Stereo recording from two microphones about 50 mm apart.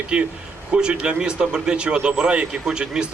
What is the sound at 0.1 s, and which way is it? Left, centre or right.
Speech, right.